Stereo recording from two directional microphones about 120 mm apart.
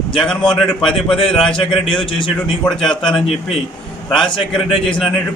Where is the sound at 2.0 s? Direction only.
45° left (ahead or behind).